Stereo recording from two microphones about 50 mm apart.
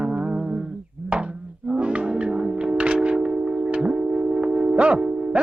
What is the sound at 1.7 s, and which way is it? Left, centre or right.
Music, right.